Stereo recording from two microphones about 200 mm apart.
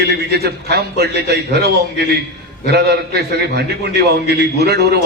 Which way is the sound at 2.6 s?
55° right (ahead or behind).